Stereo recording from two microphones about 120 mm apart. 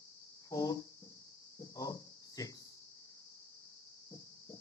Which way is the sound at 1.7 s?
30° left (ahead or behind).